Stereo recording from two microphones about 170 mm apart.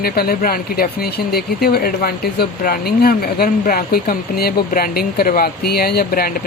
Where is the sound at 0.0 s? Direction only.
65° left (ahead or behind).